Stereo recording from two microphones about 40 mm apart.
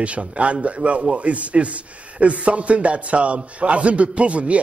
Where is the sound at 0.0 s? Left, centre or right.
Right.